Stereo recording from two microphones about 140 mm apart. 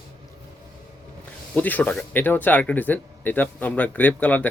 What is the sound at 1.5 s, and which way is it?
Speech, 10° left (ahead or behind).